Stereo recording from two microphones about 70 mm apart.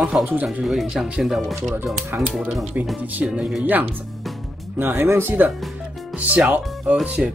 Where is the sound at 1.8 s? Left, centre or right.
Right.